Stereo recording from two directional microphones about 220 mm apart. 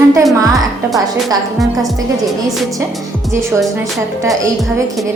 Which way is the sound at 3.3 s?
10° right (ahead or behind).